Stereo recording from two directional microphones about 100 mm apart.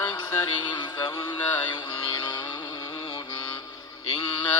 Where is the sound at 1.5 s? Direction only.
45° left (ahead or behind).